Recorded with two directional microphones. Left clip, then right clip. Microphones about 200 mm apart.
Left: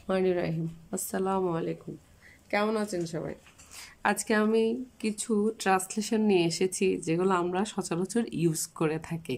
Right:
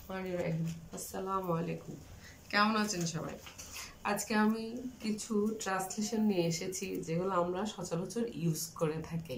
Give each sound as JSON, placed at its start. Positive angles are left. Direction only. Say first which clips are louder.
{"t": 0.1, "sound": "speech", "louder": "left 10 dB", "side_deg": 55}
{"t": 2.5, "sound": "speech", "louder": "left 2 dB", "side_deg": 35}
{"t": 4.0, "sound": "speech", "louder": "left 6 dB", "side_deg": 50}